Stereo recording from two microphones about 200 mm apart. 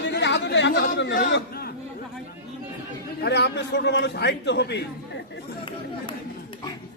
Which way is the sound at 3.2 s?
55° left (ahead or behind).